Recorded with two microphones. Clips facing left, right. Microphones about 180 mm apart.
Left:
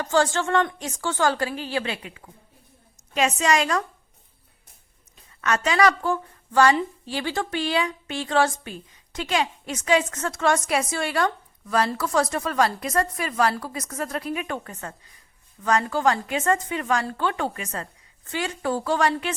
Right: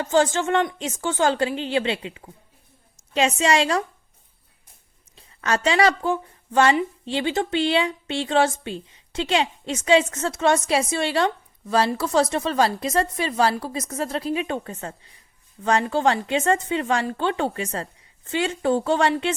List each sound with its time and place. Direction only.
0.0 s a woman's voice: 20° right (ahead or behind)
5.1 s a woman's voice: 30° right (ahead or behind)